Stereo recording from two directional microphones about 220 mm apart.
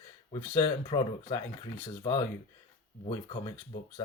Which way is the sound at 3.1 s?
20° left (ahead or behind).